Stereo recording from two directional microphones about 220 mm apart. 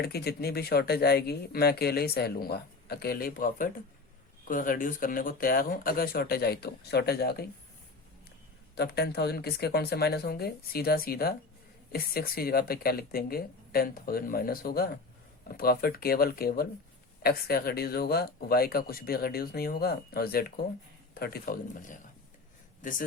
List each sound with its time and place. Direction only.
0.0 s speech: 45° left (ahead or behind)
8.7 s speech: 45° left (ahead or behind)